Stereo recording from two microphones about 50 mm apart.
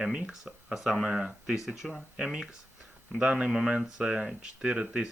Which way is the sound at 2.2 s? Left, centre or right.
Centre.